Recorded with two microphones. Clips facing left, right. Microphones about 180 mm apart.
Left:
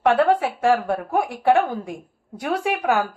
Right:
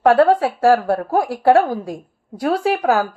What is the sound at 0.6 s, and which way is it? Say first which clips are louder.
Speech: right 7 dB; 80° right.